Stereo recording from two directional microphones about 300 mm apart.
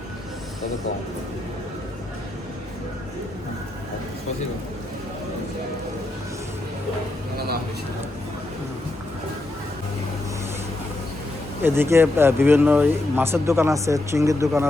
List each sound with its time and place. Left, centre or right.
7.3 s speech: right
11.6 s speech: centre